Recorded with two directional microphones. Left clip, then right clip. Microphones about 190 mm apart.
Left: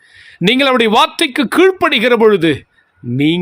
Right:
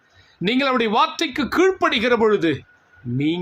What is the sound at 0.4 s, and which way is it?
Speech, 50° left (ahead or behind).